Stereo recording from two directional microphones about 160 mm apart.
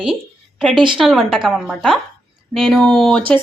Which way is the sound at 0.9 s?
Centre (ahead or behind).